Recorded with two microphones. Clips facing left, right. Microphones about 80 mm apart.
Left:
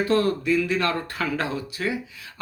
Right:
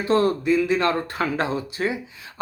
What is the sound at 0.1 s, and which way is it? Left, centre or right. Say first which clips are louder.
Speech: right 6 dB; right.